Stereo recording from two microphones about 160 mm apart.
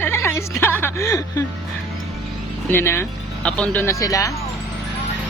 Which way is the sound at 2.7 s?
15° left (ahead or behind).